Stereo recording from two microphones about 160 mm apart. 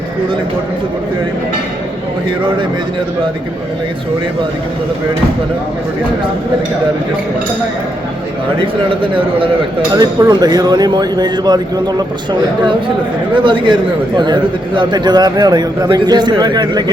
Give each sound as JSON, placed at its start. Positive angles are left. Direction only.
{"t": 8.5, "sound": "a man's voice", "side_deg": -35}
{"t": 9.9, "sound": "a man's voice", "side_deg": -25}
{"t": 14.8, "sound": "speech", "side_deg": -25}